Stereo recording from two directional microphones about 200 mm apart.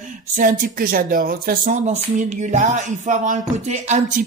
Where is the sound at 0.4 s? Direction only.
45° right (ahead or behind).